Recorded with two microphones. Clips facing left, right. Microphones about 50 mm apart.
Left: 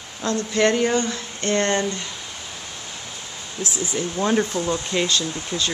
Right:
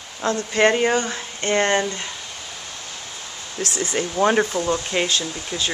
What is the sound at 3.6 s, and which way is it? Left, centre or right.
Speech, right.